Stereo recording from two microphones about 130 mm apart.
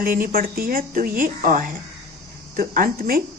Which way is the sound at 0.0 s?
90° right.